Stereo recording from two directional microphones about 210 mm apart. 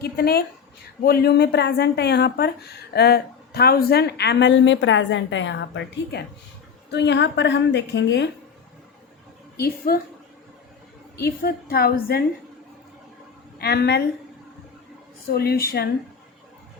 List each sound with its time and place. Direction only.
0.0 s a woman's voice: 45° left (ahead or behind)
9.6 s a woman's voice: 45° left (ahead or behind)
11.2 s a woman's voice: 45° left (ahead or behind)
13.6 s a woman's voice: 50° left (ahead or behind)
15.3 s a woman's voice: 50° left (ahead or behind)